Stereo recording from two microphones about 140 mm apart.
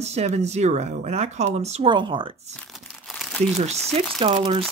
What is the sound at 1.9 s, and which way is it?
Speech, 35° right (ahead or behind).